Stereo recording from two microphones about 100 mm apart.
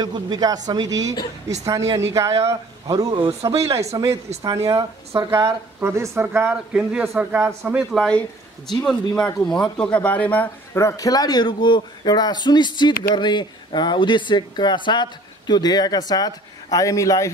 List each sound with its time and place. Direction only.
0.0 s speech: 45° right (ahead or behind)
5.8 s a man's voice: 25° right (ahead or behind)
8.6 s speech: 5° left (ahead or behind)
10.8 s a man's voice: 35° left (ahead or behind)